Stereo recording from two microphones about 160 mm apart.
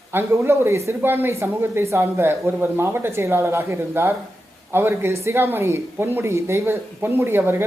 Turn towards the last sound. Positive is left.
turn(degrees=-15)  # may be behind; listen again after turning